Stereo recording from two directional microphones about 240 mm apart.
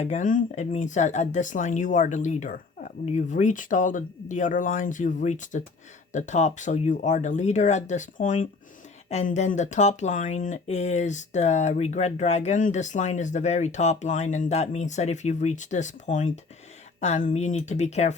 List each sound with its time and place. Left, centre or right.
0.0 s speech: left